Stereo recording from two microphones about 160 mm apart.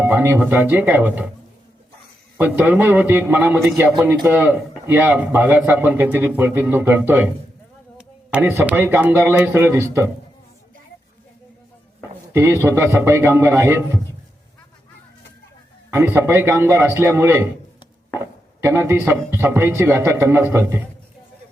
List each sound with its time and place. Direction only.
0.0 s a man's voice: 15° right (ahead or behind)
2.4 s a man's voice: 10° right (ahead or behind)
12.3 s a man's voice: 15° right (ahead or behind)
15.9 s a man's voice: 15° right (ahead or behind)
18.6 s a man's voice: 15° right (ahead or behind)